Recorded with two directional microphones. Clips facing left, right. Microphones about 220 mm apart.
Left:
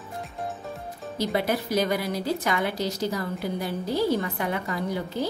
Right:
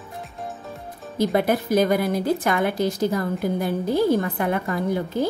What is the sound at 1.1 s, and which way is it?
A woman's voice, 50° right (ahead or behind).